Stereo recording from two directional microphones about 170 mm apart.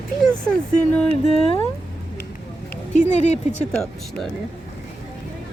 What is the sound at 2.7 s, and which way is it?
Speech, 45° left (ahead or behind).